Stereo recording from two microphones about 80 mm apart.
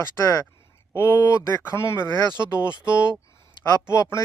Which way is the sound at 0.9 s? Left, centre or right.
Left.